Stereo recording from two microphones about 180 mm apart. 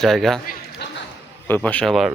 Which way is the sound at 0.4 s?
65° left (ahead or behind).